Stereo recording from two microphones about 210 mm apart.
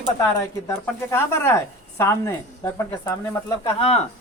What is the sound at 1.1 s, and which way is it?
A woman's voice, 10° left (ahead or behind).